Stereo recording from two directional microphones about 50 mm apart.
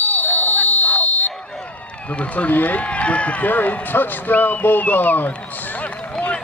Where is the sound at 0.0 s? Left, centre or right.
Left.